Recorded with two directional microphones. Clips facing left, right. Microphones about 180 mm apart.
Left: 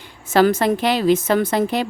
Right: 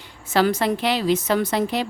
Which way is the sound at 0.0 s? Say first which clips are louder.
Left 4 dB; 50° left (ahead or behind).